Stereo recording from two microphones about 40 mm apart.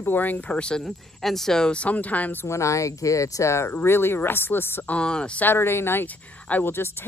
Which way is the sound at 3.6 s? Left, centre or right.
Left.